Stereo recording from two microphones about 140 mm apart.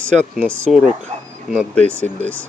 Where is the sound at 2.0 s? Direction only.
10° left (ahead or behind).